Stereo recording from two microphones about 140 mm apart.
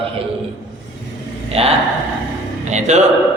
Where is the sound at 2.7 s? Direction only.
55° right (ahead or behind).